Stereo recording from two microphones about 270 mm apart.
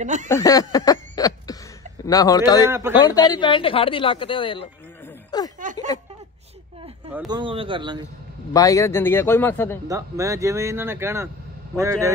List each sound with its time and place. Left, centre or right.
0.0 s a sound: right
0.3 s speech: centre
5.6 s a sound: right
7.2 s speech: centre
8.5 s speech: centre
9.8 s speech: centre